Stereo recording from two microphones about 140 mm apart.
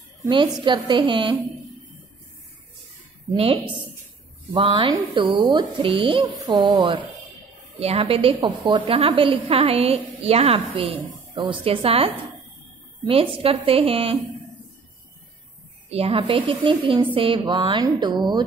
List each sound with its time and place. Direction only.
0.3 s a woman's voice: 35° right (ahead or behind)
4.5 s a woman's voice: 35° right (ahead or behind)
15.9 s a woman's voice: 45° right (ahead or behind)